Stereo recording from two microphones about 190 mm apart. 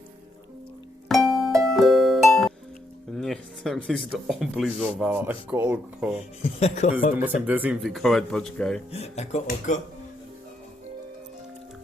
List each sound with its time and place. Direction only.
1.0 s music: centre (ahead or behind)
3.1 s speech: centre (ahead or behind)
6.4 s speech: 35° left (ahead or behind)
7.4 s speech: 10° right (ahead or behind)
8.9 s speech: 35° left (ahead or behind)